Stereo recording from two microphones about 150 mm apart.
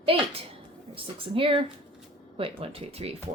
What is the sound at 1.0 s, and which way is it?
Speech, 35° right (ahead or behind).